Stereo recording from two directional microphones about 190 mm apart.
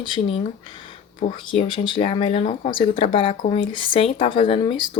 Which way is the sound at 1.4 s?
25° left (ahead or behind).